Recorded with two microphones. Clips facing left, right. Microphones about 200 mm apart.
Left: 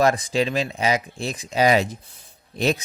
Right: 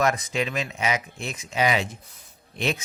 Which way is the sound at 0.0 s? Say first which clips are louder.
Left 5 dB; 30° left (ahead or behind).